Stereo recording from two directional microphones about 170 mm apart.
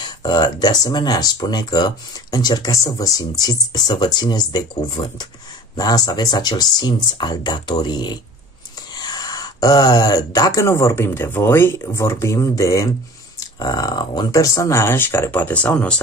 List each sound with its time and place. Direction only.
0.0 s speech: 25° left (ahead or behind); by 16.0 s 10° left (ahead or behind)